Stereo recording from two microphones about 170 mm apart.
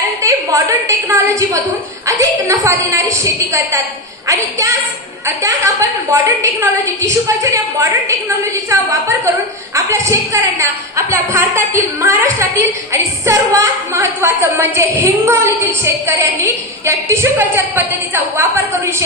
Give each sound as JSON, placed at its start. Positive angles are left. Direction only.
{"t": 0.2, "sound": "a woman's voice", "side_deg": -20}